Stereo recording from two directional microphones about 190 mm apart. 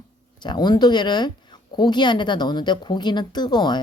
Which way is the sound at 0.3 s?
25° left (ahead or behind).